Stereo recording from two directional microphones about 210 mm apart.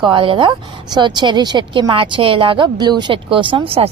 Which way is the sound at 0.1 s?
25° right (ahead or behind).